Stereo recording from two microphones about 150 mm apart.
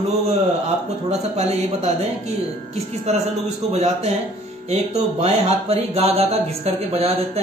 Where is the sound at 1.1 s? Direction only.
45° right (ahead or behind).